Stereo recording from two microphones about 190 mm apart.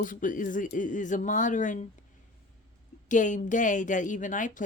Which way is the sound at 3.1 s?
40° left (ahead or behind).